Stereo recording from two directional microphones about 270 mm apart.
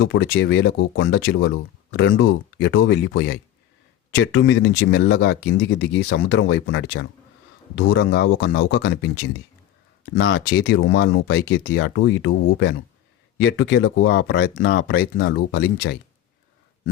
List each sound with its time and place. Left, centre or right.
0.0 s speech: left